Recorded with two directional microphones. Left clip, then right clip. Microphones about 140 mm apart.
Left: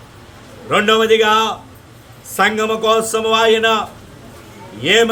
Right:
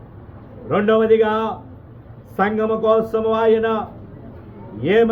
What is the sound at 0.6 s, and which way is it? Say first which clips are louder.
A man's voice: left 3 dB; 20° left (ahead or behind).